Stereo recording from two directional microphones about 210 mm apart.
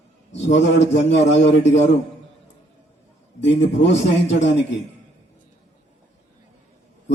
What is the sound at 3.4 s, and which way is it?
A man's voice, 60° left (ahead or behind).